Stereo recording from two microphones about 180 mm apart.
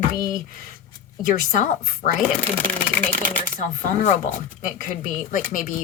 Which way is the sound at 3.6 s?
45° left (ahead or behind).